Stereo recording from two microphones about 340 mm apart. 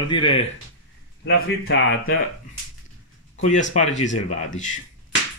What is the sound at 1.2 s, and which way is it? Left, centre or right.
Speech, left.